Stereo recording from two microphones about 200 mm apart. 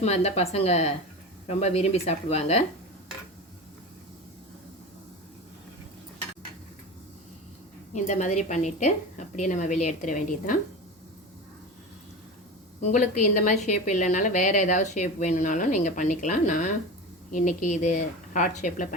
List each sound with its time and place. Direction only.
0.0 s a woman's voice: 30° left (ahead or behind)
7.9 s a woman's voice: 35° left (ahead or behind)
12.8 s a woman's voice: 40° left (ahead or behind)